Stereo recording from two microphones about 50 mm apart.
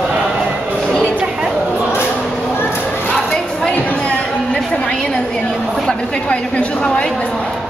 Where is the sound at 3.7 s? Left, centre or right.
Left.